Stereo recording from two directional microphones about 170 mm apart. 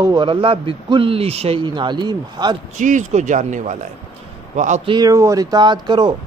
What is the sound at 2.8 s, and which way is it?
Speech, 45° right (ahead or behind).